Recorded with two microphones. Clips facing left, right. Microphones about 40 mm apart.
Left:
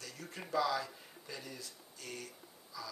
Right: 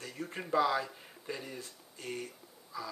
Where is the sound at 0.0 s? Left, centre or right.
Right.